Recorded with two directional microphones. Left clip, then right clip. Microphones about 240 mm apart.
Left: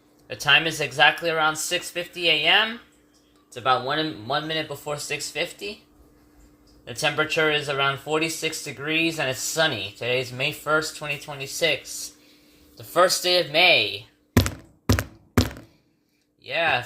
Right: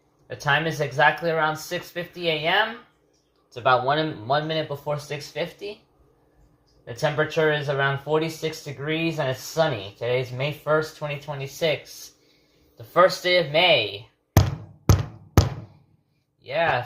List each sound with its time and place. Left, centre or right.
0.3 s speech: centre
3.5 s speech: centre
6.9 s a man's voice: centre
16.5 s speech: centre